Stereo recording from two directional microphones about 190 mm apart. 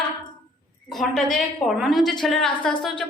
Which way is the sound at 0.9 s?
Centre (ahead or behind).